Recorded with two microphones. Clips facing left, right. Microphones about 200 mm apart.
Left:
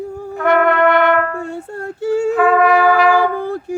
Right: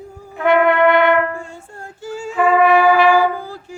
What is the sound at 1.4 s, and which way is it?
Female singing, 65° left (ahead or behind).